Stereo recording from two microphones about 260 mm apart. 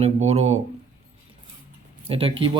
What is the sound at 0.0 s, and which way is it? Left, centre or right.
Speech, right.